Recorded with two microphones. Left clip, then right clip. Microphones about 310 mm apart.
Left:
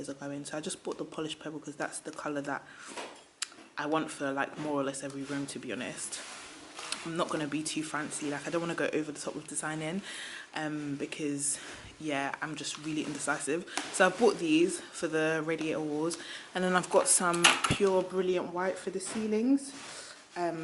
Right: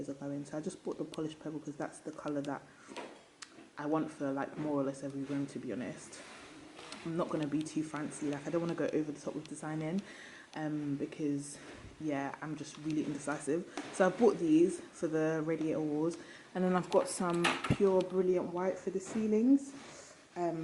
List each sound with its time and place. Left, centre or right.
0.9 s speech: centre
7.0 s speech: centre
15.8 s speech: right
16.6 s speech: centre